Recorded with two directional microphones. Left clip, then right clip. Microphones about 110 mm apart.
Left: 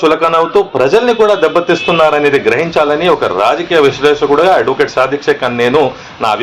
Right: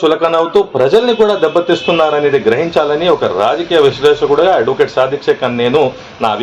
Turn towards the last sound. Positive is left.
turn(degrees=-20)  # may be behind; listen again after turning